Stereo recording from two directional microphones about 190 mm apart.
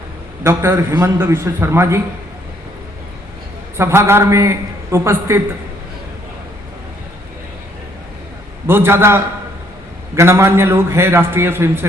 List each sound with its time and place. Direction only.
0.4 s a man's voice: 10° right (ahead or behind)
3.8 s a man's voice: 15° right (ahead or behind)
8.6 s a man's voice: 10° right (ahead or behind)